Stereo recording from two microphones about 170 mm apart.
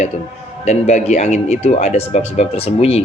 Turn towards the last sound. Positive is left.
turn(degrees=35)  # may be behind; listen again after turning